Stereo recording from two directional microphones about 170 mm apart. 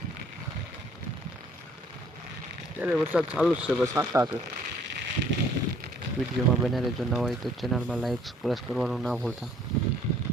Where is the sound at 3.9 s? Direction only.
15° right (ahead or behind).